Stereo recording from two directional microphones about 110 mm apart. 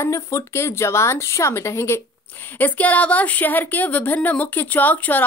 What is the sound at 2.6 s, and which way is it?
A woman's voice, 15° left (ahead or behind).